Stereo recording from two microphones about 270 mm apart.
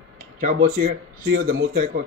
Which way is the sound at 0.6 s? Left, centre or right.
Right.